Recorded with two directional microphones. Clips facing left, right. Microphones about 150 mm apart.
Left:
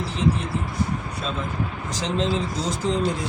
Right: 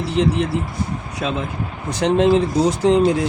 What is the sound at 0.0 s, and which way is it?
Speech, 70° right (ahead or behind).